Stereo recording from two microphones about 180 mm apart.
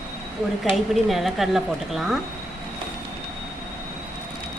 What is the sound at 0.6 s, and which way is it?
A woman's voice, centre (ahead or behind).